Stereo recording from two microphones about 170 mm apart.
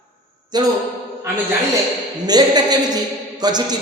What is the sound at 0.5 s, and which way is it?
Speech, 25° right (ahead or behind).